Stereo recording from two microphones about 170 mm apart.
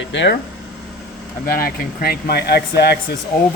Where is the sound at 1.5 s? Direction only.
60° left (ahead or behind).